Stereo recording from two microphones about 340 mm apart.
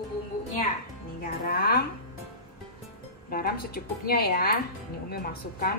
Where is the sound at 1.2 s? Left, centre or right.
Left.